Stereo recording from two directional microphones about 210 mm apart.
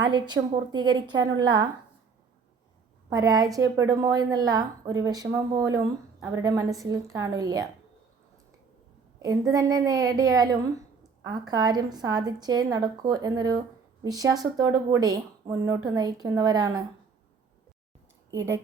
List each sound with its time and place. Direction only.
0.0 s a woman's voice: 20° right (ahead or behind)
3.1 s speech: 15° right (ahead or behind)
9.1 s a woman's voice: 15° right (ahead or behind)